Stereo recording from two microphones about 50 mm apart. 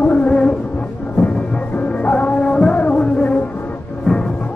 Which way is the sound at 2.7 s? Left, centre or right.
Left.